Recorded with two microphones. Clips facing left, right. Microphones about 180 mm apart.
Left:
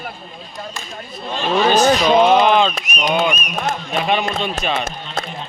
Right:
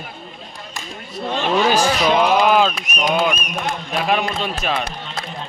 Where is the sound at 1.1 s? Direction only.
70° right (ahead or behind).